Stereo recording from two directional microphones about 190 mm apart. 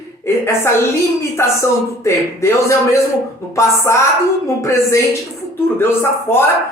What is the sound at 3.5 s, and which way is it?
Speech, 15° left (ahead or behind).